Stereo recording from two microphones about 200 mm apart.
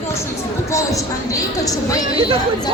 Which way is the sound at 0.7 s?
15° left (ahead or behind).